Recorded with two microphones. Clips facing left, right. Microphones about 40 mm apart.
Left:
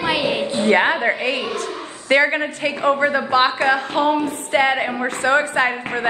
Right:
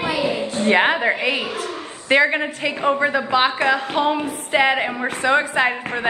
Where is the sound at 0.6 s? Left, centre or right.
Right.